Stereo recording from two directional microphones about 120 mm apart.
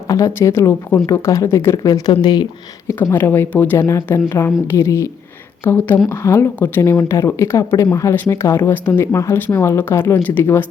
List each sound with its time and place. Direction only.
0.1 s speech: 25° left (ahead or behind)
2.8 s speech: 20° left (ahead or behind)